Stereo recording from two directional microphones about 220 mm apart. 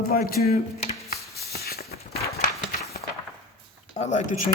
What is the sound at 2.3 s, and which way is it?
Clip-clop, 35° left (ahead or behind).